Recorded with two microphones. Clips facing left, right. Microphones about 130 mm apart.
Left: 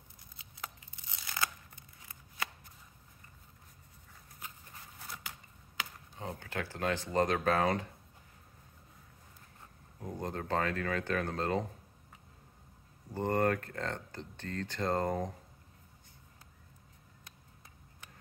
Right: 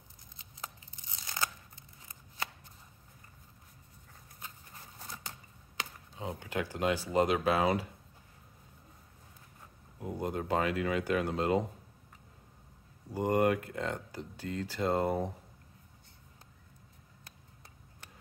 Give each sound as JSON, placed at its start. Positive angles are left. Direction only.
{"t": 1.2, "sound": "tearing", "side_deg": -20}
{"t": 4.9, "sound": "a sound", "side_deg": -35}
{"t": 6.1, "sound": "speech", "side_deg": -15}
{"t": 9.9, "sound": "speech", "side_deg": -10}
{"t": 13.1, "sound": "speech", "side_deg": -15}